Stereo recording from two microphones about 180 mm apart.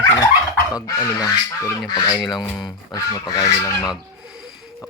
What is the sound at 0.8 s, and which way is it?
Speech, 20° left (ahead or behind).